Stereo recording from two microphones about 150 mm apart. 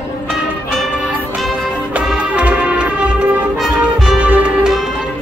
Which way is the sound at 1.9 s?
10° right (ahead or behind).